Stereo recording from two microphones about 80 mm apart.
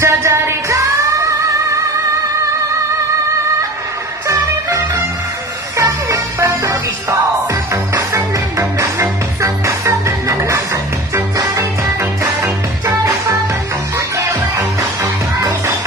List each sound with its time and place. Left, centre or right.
0.0 s music: right
4.3 s music: right